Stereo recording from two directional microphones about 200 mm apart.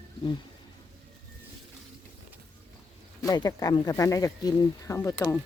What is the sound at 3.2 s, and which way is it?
Speech, 20° left (ahead or behind).